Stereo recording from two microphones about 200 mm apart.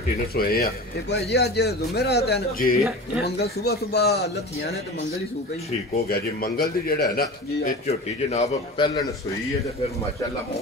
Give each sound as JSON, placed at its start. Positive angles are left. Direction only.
{"t": 0.4, "sound": "speech", "side_deg": 50}
{"t": 6.0, "sound": "speech", "side_deg": 50}
{"t": 7.8, "sound": "a man's voice", "side_deg": 35}